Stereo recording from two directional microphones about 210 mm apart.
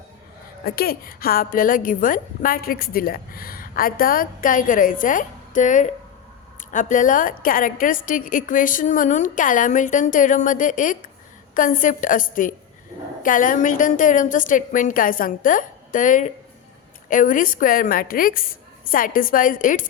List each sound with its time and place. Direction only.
0.6 s a woman's voice: 45° left (ahead or behind)